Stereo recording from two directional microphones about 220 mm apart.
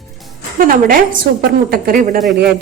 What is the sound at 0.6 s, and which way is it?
A woman's voice, 40° right (ahead or behind).